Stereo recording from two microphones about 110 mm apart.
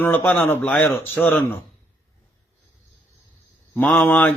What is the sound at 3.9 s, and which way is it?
Speech, 20° left (ahead or behind).